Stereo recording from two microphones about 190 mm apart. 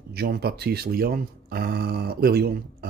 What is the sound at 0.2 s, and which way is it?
Speech, 55° right (ahead or behind).